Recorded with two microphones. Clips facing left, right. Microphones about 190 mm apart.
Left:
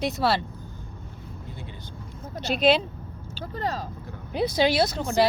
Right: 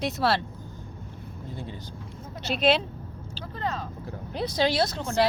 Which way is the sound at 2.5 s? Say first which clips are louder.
Left 2 dB; centre (ahead or behind).